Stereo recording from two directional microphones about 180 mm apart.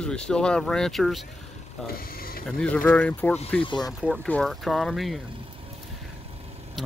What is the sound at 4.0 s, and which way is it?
Speech, centre (ahead or behind).